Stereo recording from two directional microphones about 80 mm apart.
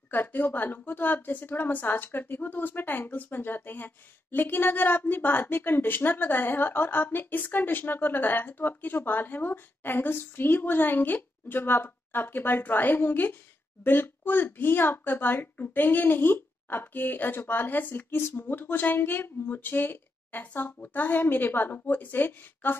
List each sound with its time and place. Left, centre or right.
0.1 s a woman's voice: left